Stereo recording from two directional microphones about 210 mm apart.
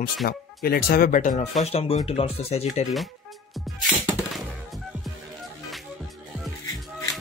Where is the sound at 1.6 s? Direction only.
30° left (ahead or behind).